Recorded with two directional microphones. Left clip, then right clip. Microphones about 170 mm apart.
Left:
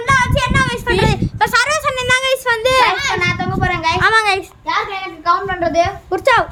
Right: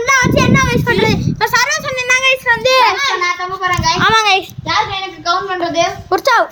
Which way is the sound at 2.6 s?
Centre (ahead or behind).